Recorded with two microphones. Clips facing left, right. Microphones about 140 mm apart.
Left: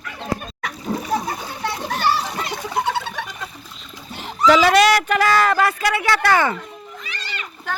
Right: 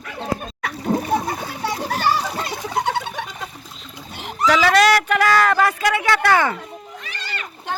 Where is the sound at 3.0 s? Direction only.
15° right (ahead or behind).